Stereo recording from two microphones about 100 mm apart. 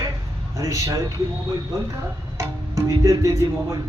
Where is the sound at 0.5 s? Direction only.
30° right (ahead or behind).